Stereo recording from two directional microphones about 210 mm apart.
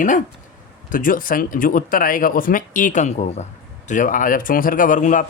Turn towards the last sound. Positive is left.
turn(degrees=35)  # may be behind; listen again after turning